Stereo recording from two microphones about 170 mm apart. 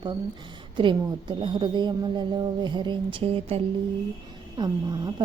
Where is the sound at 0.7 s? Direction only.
30° right (ahead or behind).